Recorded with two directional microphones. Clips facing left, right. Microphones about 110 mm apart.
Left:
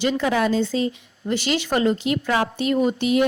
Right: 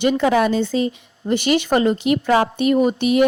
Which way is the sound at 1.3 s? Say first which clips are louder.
Right 5 dB; 55° right (ahead or behind).